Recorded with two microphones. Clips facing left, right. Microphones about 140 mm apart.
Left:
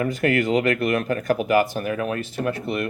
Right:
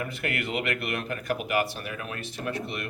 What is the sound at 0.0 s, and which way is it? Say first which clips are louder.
Speech: left 11 dB; 45° left (ahead or behind).